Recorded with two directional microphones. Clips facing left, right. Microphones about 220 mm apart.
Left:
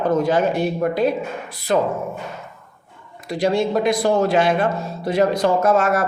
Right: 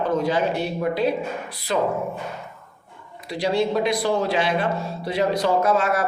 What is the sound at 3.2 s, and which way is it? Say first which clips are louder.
Speech: left 3 dB; 50° left (ahead or behind).